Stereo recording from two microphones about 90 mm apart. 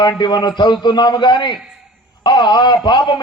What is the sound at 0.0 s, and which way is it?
A man's voice, 55° left (ahead or behind).